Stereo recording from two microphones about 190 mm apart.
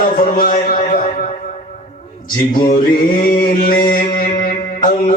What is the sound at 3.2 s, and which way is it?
Music, 50° left (ahead or behind).